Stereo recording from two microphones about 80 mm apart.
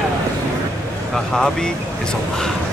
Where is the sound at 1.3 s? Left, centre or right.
Centre.